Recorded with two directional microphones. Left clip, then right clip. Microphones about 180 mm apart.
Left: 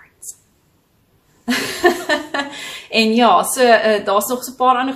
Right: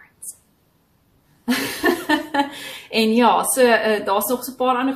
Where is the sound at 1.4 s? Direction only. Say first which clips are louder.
Left 5 dB; 20° left (ahead or behind).